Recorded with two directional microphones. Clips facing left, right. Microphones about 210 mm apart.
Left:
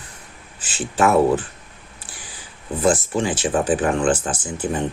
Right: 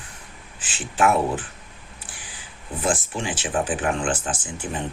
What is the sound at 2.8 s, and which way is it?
Speech, 40° left (ahead or behind).